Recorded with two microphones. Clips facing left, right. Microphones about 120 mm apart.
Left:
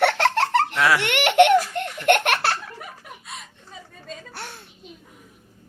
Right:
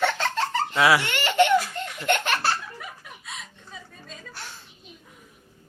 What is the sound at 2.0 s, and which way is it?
Baby laughter, 65° left (ahead or behind).